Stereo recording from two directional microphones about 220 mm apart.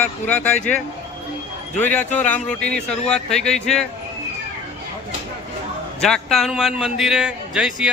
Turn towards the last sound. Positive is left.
turn(degrees=-5)  # may be behind; listen again after turning